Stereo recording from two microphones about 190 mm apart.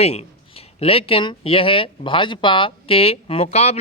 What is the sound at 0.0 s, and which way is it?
Speech, 35° left (ahead or behind).